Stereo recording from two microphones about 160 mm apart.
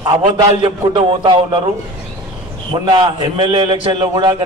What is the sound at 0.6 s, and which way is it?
A man's voice, 30° right (ahead or behind).